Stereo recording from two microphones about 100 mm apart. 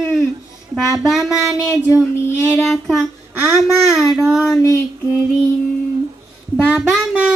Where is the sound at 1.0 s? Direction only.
5° right (ahead or behind).